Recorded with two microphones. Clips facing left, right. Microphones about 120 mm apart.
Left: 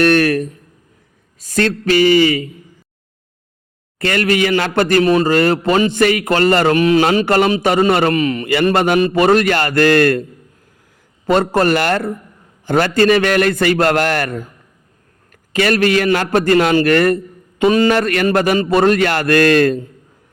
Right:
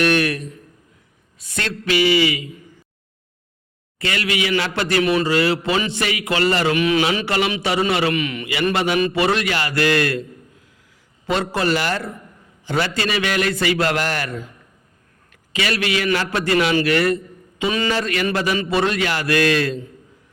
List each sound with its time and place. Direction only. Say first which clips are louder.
0.0 s a man's voice: left 6 dB; 45° left (ahead or behind)
3.9 s a man's voice: left 7 dB; 50° left (ahead or behind)
11.3 s a man's voice: left 7 dB; 50° left (ahead or behind)